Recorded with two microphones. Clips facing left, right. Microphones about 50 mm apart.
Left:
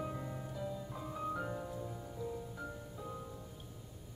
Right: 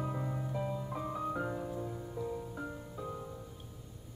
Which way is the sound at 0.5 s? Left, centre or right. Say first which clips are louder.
Right 5 dB; right.